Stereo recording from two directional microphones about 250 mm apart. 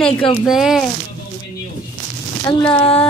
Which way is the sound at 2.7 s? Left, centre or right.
Left.